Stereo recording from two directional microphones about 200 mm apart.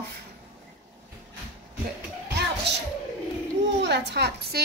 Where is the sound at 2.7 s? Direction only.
60° right (ahead or behind).